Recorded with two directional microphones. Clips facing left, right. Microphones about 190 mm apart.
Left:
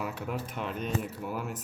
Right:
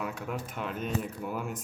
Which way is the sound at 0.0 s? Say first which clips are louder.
Left 1 dB; centre (ahead or behind).